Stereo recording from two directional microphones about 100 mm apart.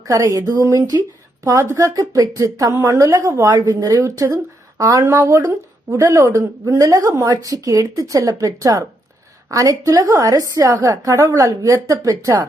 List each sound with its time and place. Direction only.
0.0 s a woman's voice: 30° right (ahead or behind)